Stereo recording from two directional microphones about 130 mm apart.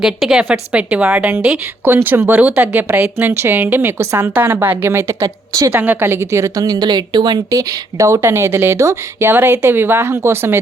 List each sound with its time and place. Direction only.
0.0 s a woman's voice: 5° right (ahead or behind)